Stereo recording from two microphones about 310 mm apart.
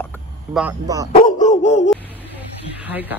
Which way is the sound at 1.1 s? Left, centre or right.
Left.